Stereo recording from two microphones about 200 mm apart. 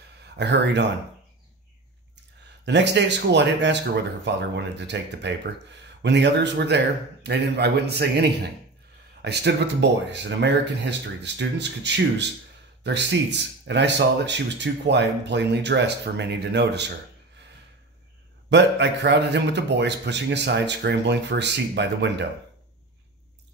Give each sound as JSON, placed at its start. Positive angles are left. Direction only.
{"t": 0.4, "sound": "speech", "side_deg": -60}
{"t": 2.6, "sound": "speech", "side_deg": -60}
{"t": 18.5, "sound": "speech", "side_deg": -60}